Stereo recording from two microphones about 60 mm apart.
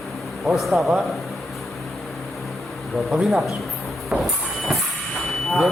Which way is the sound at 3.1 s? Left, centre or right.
Centre.